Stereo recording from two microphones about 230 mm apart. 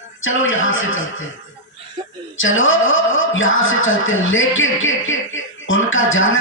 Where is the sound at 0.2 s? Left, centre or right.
Left.